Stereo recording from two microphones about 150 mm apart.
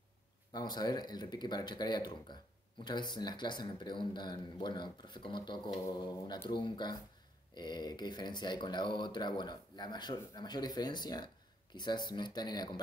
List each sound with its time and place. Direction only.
0.5 s speech: 30° left (ahead or behind)